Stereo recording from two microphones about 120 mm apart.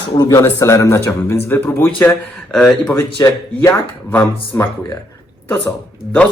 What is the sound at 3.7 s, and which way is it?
Speech, 15° left (ahead or behind).